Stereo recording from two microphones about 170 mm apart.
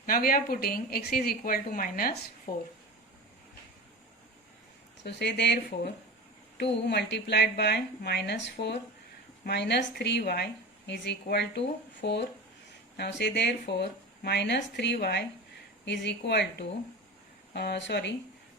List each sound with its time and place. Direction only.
0.0 s a woman's voice: 60° left (ahead or behind)
5.0 s a woman's voice: 80° left
15.9 s a woman's voice: 85° left